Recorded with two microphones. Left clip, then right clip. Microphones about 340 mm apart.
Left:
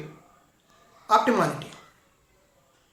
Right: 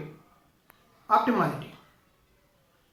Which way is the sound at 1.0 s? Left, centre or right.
Centre.